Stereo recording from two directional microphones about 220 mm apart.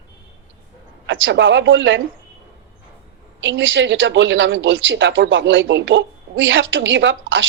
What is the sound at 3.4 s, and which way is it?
Speech, 60° right (ahead or behind).